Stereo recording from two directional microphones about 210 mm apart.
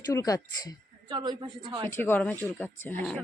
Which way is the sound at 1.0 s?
20° right (ahead or behind).